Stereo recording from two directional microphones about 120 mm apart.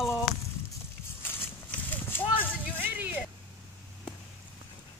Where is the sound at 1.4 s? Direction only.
15° left (ahead or behind).